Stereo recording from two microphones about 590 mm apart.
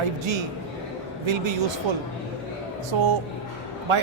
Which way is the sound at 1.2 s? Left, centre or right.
Right.